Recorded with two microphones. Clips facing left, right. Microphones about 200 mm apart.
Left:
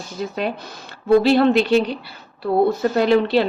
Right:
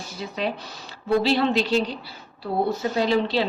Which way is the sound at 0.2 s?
50° left (ahead or behind).